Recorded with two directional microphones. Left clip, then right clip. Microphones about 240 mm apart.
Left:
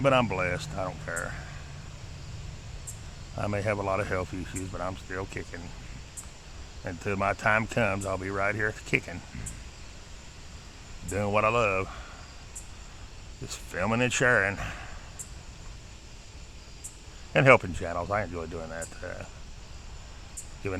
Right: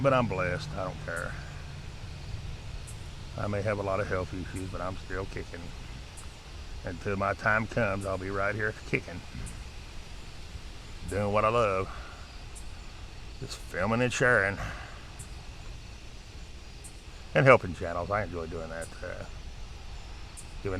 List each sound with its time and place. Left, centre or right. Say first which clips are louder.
0.0 s speech: left 2 dB; centre
3.3 s speech: left 2 dB; centre
6.8 s speech: left 2 dB; centre
11.1 s speech: left 1 dB; centre
13.5 s speech: left 1 dB; centre
17.3 s speech: left 1 dB; centre
20.6 s speech: left 1 dB; centre